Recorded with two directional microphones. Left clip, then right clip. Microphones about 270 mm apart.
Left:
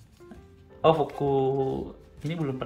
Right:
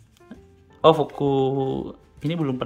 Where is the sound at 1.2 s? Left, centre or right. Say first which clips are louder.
Right 3 dB; right.